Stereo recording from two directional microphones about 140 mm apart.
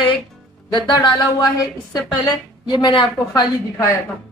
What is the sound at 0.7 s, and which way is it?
A woman's voice, 30° left (ahead or behind).